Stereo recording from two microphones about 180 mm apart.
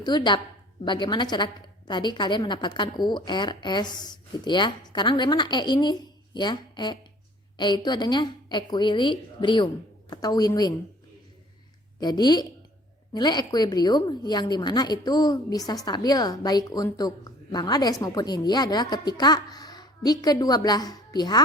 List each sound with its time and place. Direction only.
0.0 s a woman's voice: 25° left (ahead or behind)
11.9 s a woman's voice: 20° left (ahead or behind)